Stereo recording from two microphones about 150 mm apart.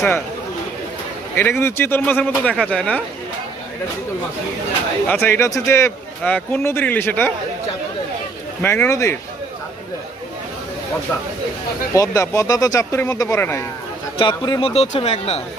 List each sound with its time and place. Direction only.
1.4 s speech: 15° left (ahead or behind)
5.0 s speech: 15° left (ahead or behind)
8.6 s speech: 15° left (ahead or behind)
11.9 s speech: 20° left (ahead or behind)
14.2 s a man's voice: 30° left (ahead or behind)
14.7 s speech: 45° left (ahead or behind)